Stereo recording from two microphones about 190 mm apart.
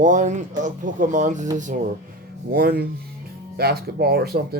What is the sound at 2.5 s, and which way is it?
Speech, 55° right (ahead or behind).